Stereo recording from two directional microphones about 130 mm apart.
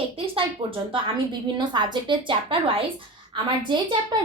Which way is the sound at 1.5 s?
35° right (ahead or behind).